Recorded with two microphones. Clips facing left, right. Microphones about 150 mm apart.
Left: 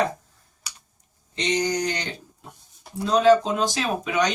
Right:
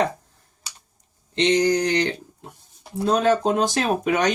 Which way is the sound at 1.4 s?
60° right (ahead or behind).